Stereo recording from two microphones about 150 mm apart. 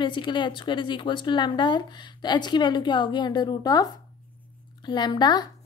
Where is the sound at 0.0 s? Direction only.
30° left (ahead or behind).